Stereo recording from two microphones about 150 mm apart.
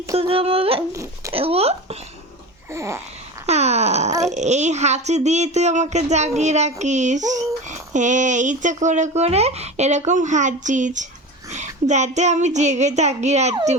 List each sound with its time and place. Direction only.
0.2 s speech: 40° right (ahead or behind)
2.7 s a sound: 20° right (ahead or behind)
3.4 s speech: 45° right (ahead or behind)